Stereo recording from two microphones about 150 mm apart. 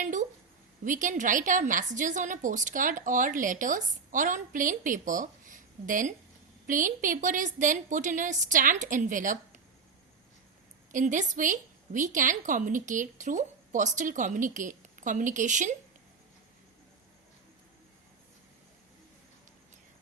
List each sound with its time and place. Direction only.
0.0 s a sound: 55° right (ahead or behind)
0.9 s a woman's voice: 60° right (ahead or behind)
10.9 s a woman's voice: 55° right (ahead or behind)